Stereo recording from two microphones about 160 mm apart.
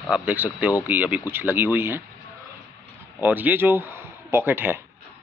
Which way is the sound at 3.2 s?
10° right (ahead or behind).